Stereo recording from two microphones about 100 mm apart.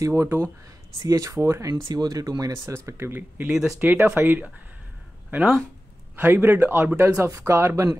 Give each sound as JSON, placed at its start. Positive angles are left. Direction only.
{"t": 0.0, "sound": "speech", "side_deg": -30}
{"t": 3.4, "sound": "speech", "side_deg": -5}
{"t": 3.7, "sound": "speech", "side_deg": -25}